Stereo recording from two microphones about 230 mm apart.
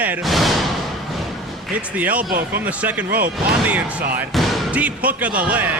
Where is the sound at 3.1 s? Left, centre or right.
Right.